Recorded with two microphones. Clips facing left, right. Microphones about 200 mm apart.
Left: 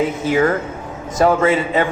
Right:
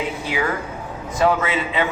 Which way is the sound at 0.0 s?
45° left (ahead or behind).